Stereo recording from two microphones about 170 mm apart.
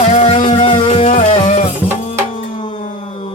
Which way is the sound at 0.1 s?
30° left (ahead or behind).